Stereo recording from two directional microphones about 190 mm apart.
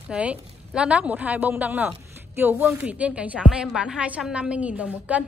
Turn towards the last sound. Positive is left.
turn(degrees=-5)  # may be behind; listen again after turning